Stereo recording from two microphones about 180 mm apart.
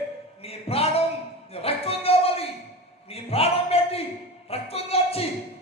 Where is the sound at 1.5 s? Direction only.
35° left (ahead or behind).